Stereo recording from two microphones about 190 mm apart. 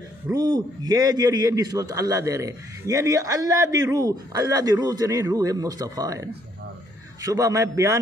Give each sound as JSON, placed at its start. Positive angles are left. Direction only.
{"t": 0.3, "sound": "a man's voice", "side_deg": -20}